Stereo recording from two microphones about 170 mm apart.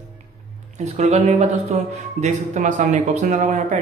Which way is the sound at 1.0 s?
40° right (ahead or behind).